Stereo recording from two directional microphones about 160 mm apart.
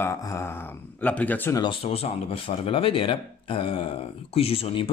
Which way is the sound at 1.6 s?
35° left (ahead or behind).